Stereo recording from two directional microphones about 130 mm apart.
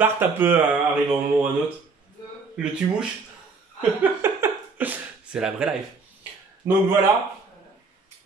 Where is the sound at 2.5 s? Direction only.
5° right (ahead or behind).